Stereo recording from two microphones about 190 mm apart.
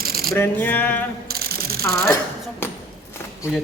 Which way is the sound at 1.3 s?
55° right (ahead or behind).